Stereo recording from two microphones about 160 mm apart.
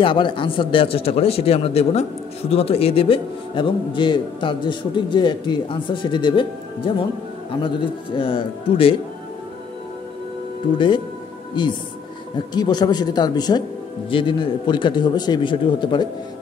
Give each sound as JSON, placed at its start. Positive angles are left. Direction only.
{"t": 0.0, "sound": "a man's voice", "side_deg": 30}
{"t": 11.6, "sound": "a man's voice", "side_deg": 30}